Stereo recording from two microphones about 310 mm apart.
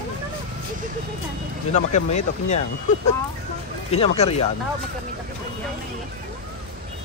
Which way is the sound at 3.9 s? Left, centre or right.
Centre.